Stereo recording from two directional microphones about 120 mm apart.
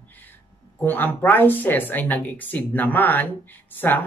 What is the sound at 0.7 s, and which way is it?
Speech, 15° left (ahead or behind).